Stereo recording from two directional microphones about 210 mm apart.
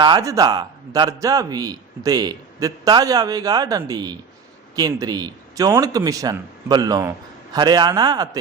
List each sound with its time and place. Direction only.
0.0 s a man's voice: 20° right (ahead or behind)